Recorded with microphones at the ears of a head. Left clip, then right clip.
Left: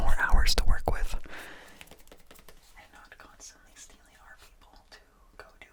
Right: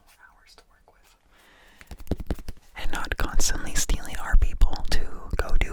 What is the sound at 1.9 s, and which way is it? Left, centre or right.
Whispering, right.